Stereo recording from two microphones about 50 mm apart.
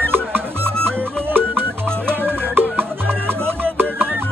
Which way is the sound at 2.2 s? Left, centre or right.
Right.